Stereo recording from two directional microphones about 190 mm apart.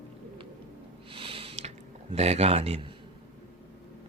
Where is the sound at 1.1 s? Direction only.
30° right (ahead or behind).